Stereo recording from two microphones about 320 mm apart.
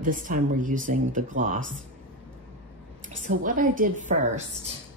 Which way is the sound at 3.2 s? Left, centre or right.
Right.